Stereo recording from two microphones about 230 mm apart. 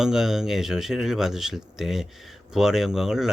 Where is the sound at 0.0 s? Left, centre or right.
Centre.